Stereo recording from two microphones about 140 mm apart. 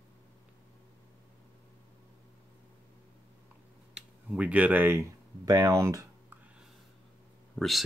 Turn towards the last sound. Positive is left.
turn(degrees=0)  # may be behind; listen again after turning